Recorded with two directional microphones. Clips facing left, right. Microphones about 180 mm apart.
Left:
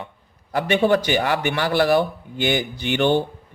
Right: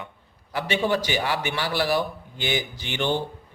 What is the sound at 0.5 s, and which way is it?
A man's voice, 55° left (ahead or behind).